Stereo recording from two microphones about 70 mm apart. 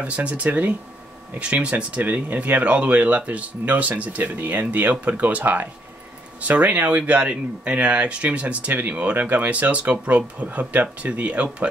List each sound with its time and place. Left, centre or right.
0.0 s speech: centre